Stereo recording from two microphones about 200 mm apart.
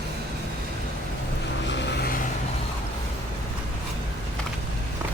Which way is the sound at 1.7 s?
50° left (ahead or behind).